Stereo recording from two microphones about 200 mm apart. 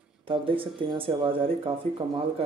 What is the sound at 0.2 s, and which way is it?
A man's voice, 25° right (ahead or behind).